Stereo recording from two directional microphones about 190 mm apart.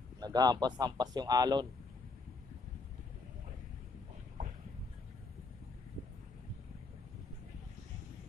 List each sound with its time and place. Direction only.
0.2 s a man's voice: 20° right (ahead or behind)